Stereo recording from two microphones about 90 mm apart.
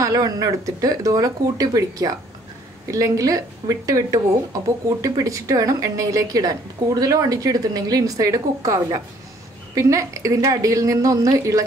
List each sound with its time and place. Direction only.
0.0 s speech: 40° right (ahead or behind)